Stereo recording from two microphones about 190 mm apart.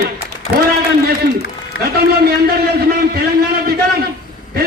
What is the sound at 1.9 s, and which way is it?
A man's voice, 55° right (ahead or behind).